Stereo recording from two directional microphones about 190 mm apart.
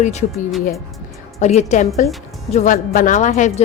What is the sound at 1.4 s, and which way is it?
Speech, 35° left (ahead or behind).